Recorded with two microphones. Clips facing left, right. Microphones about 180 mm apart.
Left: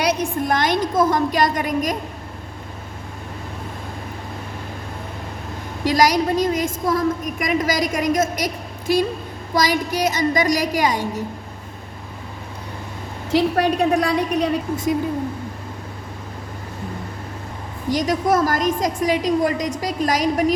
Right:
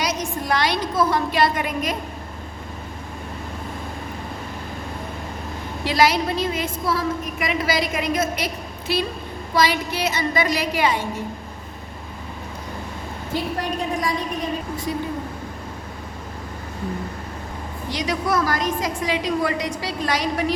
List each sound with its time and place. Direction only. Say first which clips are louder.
0.0 s a woman's voice: left 5 dB; 60° left (ahead or behind); by 2.0 s 40° left (ahead or behind)
5.8 s a woman's voice: left 2 dB; 45° left (ahead or behind)
13.3 s a woman's voice: left 8 dB; 70° left (ahead or behind)
17.8 s a woman's voice: left 5 dB; 45° left (ahead or behind)